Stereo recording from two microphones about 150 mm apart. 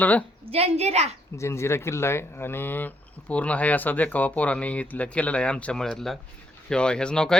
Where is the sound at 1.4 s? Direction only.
20° left (ahead or behind).